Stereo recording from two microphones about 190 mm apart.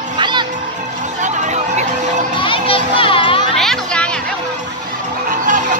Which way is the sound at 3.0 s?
30° left (ahead or behind).